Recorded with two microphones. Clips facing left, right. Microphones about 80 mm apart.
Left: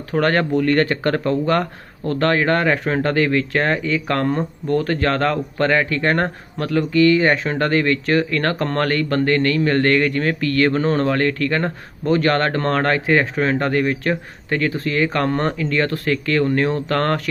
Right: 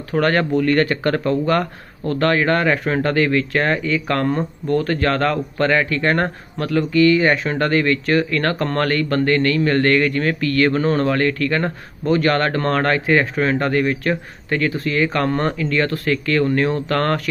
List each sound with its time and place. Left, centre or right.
0.1 s speech: left